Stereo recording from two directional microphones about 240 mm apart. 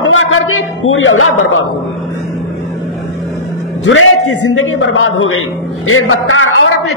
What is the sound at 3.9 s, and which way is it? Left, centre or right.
A woman's voice, left.